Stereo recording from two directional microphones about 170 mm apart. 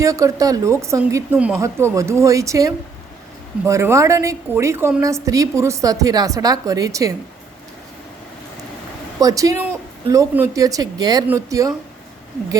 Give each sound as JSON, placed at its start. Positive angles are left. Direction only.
{"t": 0.0, "sound": "a woman's voice", "side_deg": -20}
{"t": 9.2, "sound": "speech", "side_deg": -20}